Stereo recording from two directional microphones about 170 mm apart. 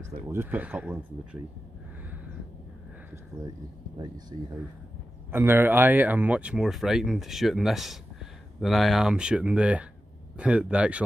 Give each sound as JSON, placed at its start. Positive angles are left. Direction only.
{"t": 0.3, "sound": "speech", "side_deg": -10}
{"t": 5.3, "sound": "speech", "side_deg": -15}